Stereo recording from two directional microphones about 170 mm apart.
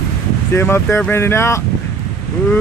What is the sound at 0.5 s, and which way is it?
Speech, 15° left (ahead or behind).